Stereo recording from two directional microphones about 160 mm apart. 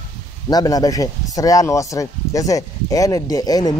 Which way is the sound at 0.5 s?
25° left (ahead or behind).